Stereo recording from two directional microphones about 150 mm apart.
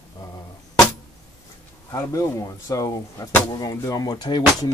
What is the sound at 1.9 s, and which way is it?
Speech, 20° left (ahead or behind).